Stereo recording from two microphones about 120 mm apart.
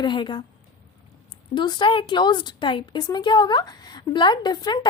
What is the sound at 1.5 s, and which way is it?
A woman's voice, 40° left (ahead or behind).